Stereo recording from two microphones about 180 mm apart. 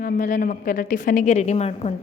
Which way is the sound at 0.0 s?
50° left (ahead or behind).